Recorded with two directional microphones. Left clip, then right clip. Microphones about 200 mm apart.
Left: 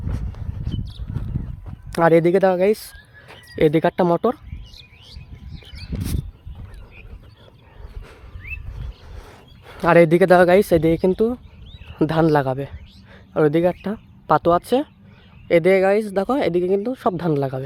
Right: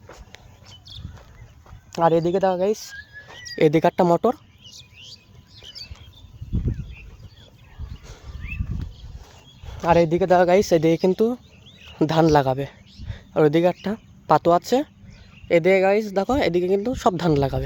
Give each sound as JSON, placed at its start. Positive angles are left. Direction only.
{"t": 0.6, "sound": "a sound", "side_deg": 0}
{"t": 1.9, "sound": "speech", "side_deg": 30}
{"t": 3.5, "sound": "speech", "side_deg": 0}
{"t": 9.6, "sound": "speech", "side_deg": 25}